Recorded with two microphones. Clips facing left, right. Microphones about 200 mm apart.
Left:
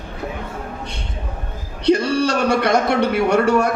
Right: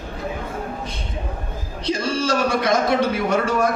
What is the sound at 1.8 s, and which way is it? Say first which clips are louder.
A man's voice: left 7 dB; 65° left (ahead or behind).